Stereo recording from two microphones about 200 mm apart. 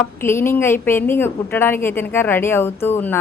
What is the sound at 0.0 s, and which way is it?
A woman's voice, 10° left (ahead or behind).